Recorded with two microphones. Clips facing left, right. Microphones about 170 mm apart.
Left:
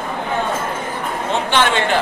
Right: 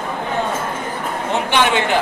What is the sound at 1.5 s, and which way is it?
Speech, 15° right (ahead or behind).